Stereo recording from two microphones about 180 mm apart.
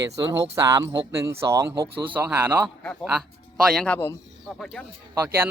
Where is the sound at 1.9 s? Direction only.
30° right (ahead or behind).